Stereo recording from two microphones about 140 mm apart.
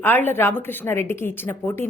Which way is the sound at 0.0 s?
15° left (ahead or behind).